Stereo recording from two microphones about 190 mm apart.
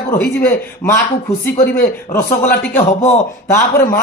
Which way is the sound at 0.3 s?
10° left (ahead or behind).